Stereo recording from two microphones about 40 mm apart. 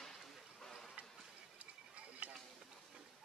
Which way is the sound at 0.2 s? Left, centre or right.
Centre.